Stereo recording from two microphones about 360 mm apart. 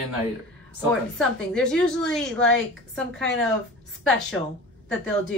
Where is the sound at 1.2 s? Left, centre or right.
Centre.